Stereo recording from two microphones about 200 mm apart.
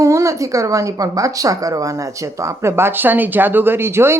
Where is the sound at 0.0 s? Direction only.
15° right (ahead or behind).